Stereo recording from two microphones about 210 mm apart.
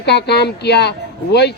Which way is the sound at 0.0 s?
50° left (ahead or behind).